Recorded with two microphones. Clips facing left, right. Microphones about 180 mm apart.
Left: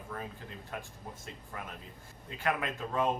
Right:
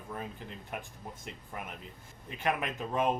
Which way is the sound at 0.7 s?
20° right (ahead or behind).